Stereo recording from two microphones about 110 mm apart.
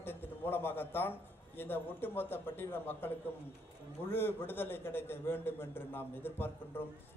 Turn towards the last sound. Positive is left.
turn(degrees=20)  # may be behind; listen again after turning